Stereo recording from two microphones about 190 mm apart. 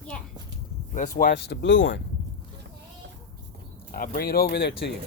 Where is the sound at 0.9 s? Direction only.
40° left (ahead or behind).